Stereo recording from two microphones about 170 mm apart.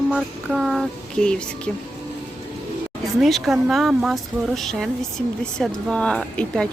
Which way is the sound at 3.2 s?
Centre (ahead or behind).